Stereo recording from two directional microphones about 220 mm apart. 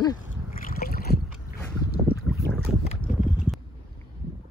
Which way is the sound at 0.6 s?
40° left (ahead or behind).